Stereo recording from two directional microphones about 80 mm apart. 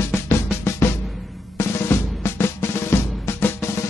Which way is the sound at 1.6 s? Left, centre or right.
Left.